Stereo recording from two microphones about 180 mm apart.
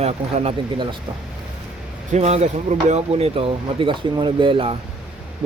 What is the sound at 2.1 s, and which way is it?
Speech, 35° right (ahead or behind).